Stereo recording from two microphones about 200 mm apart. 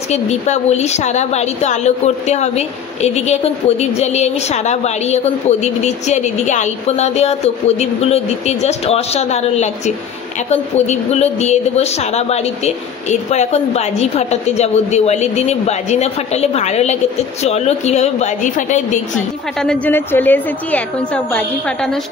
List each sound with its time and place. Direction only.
0.1 s a woman's voice: 35° left (ahead or behind)
19.6 s a woman's voice: 5° left (ahead or behind)